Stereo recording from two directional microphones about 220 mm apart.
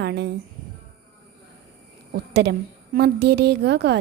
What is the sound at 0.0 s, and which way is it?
Speech, 50° right (ahead or behind).